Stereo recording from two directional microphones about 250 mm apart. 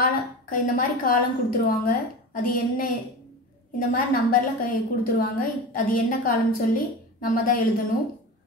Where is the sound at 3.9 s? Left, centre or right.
Left.